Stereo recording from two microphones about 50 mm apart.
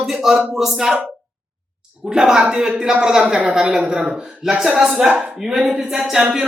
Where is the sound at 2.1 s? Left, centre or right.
Centre.